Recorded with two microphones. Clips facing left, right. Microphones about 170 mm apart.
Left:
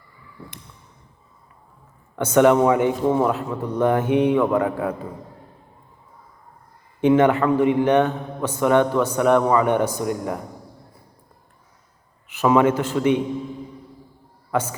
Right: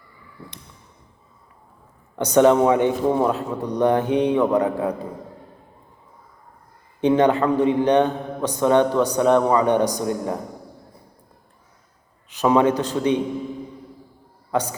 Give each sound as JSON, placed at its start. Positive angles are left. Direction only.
{"t": 2.1, "sound": "a man's voice", "side_deg": -20}
{"t": 7.0, "sound": "a man's voice", "side_deg": -20}
{"t": 12.4, "sound": "a man's voice", "side_deg": -20}